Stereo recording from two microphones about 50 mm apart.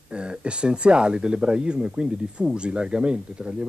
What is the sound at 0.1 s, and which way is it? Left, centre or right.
Speech, right.